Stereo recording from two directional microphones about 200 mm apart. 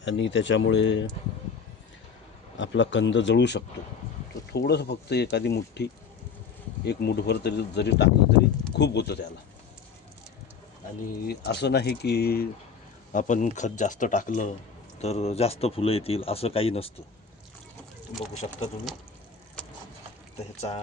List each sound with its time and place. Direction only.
0.0 s speech: 65° left (ahead or behind)
2.6 s speech: 70° left (ahead or behind)
11.3 s speech: 55° left (ahead or behind)
13.1 s speech: 40° left (ahead or behind)
19.6 s a sound: 5° left (ahead or behind)